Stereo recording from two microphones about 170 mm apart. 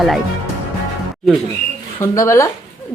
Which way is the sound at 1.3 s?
Centre (ahead or behind).